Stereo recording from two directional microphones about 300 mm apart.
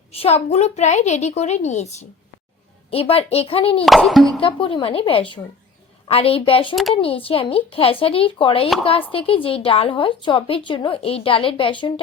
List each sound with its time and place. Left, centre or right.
0.1 s a woman's voice: centre
3.8 s speech: centre
4.4 s speech: centre